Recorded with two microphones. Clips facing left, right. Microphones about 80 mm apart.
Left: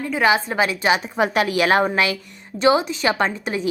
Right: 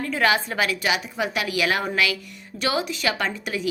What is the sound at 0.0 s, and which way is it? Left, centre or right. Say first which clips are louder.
A woman's voice: left 3 dB; centre.